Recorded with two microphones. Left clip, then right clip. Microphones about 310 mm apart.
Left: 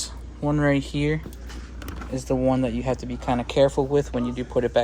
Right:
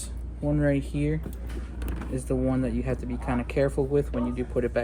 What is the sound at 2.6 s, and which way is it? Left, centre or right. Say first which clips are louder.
Speech: left 4 dB; centre.